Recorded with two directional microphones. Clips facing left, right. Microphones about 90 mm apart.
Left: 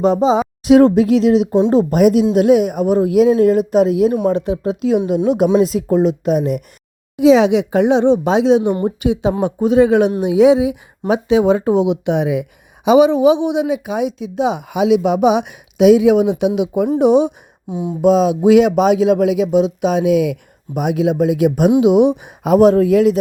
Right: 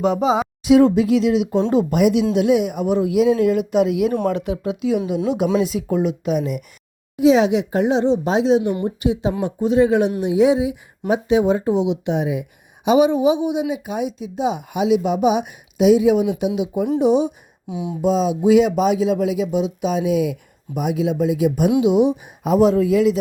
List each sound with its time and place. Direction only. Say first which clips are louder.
0.0 s speech: left 4 dB; 35° left (ahead or behind)
0.6 s speech: left 4 dB; 50° left (ahead or behind)
5.5 s speech: left 6 dB; 45° left (ahead or behind)
7.2 s speech: left 4 dB; 90° left; by 10.1 s 70° left (ahead or behind)
10.2 s speech: left 5 dB; 80° left
11.7 s speech: left 4 dB; 55° left (ahead or behind); by 16.3 s 85° left
16.6 s speech: left 4 dB; 75° left (ahead or behind); by 23.1 s 50° left (ahead or behind)